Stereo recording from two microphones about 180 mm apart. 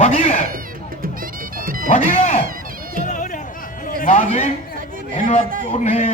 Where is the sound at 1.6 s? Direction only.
50° right (ahead or behind).